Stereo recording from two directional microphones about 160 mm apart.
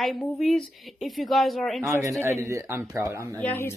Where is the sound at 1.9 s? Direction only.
20° right (ahead or behind).